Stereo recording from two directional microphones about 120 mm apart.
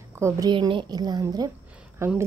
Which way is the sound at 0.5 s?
40° right (ahead or behind).